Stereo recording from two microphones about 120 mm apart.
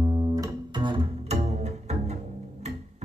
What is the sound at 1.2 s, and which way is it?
Bowed string instrument, 65° right (ahead or behind).